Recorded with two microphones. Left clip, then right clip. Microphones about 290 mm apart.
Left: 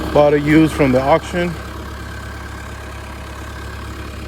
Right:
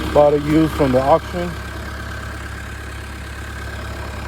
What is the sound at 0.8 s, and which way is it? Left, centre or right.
Speech, left.